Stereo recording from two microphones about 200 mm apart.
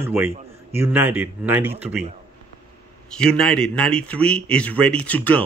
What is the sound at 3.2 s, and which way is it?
Speech, 5° left (ahead or behind).